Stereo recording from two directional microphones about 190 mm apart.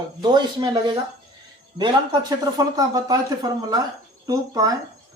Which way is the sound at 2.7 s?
20° right (ahead or behind).